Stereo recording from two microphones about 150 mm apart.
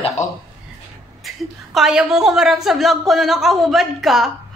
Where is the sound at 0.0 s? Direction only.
50° left (ahead or behind).